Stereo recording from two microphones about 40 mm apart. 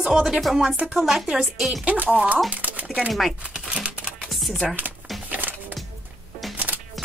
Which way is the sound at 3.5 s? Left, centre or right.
Right.